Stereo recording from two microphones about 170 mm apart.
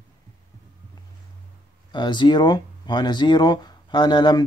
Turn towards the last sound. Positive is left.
turn(degrees=25)  # may be behind; listen again after turning